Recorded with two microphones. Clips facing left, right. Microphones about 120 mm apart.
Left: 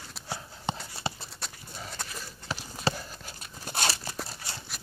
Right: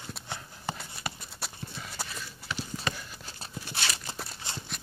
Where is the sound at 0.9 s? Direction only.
30° left (ahead or behind).